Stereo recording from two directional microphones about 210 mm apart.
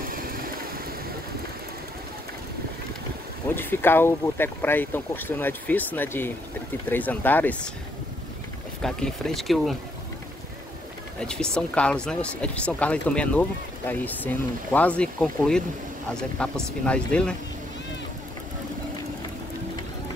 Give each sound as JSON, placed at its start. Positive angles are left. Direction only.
{"t": 0.1, "sound": "vehicle", "side_deg": -45}
{"t": 3.5, "sound": "speech", "side_deg": 10}
{"t": 8.8, "sound": "speech", "side_deg": 0}
{"t": 11.1, "sound": "speech", "side_deg": 5}